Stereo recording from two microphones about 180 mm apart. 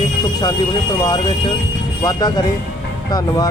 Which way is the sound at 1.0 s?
25° left (ahead or behind).